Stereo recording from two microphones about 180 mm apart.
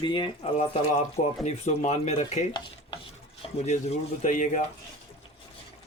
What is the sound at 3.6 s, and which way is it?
Speech, 35° left (ahead or behind).